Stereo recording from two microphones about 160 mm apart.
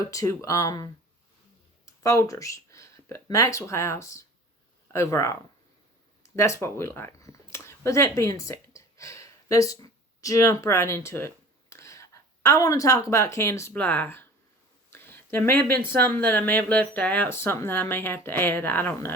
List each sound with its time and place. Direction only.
0.1 s speech: 20° left (ahead or behind)
14.8 s a sound: 15° left (ahead or behind)
15.9 s speech: 15° left (ahead or behind)